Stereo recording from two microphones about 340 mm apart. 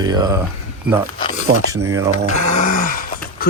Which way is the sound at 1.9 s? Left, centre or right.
Centre.